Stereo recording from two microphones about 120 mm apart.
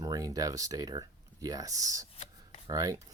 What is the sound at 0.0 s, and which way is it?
Speech, 30° right (ahead or behind).